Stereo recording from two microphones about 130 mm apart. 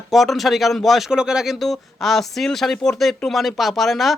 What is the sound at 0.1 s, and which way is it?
Speech, centre (ahead or behind).